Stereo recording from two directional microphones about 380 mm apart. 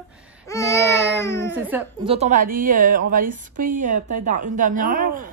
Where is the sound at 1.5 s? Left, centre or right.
Centre.